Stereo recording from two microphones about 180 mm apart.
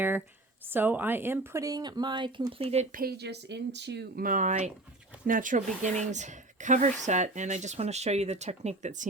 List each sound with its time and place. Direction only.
0.7 s speech: 10° right (ahead or behind); by 2.8 s 30° right (ahead or behind)
2.9 s speech: 60° right (ahead or behind); by 9.0 s 40° right (ahead or behind)